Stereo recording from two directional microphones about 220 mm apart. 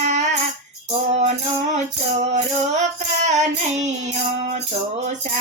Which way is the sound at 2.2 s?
30° right (ahead or behind).